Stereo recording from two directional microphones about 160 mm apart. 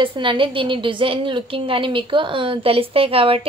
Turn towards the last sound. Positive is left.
turn(degrees=-35)  # may be behind; listen again after turning